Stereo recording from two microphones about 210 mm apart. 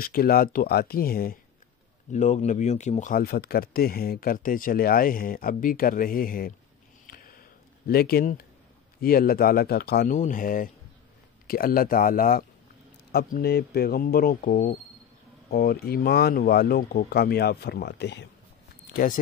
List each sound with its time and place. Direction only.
0.0 s speech: 45° left (ahead or behind)
7.1 s a sound: 45° left (ahead or behind)
9.0 s speech: 45° left (ahead or behind)
10.1 s speech: 40° left (ahead or behind); by 18.3 s 55° left (ahead or behind)
19.0 s speech: 45° left (ahead or behind)